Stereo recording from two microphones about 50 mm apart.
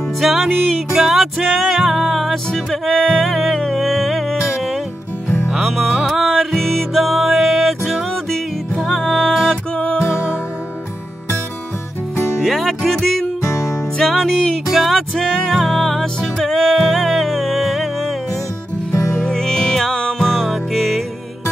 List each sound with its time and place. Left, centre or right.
0.2 s music: centre
1.4 s music: centre
2.5 s music: centre
5.5 s music: centre
12.4 s music: centre
13.4 s music: left
13.9 s music: centre
19.1 s music: centre